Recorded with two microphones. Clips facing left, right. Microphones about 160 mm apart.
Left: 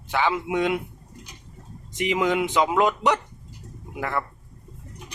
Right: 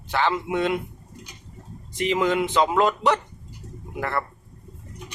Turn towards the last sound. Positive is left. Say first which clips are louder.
# right 1 dB
turn(degrees=10)  # may be behind; listen again after turning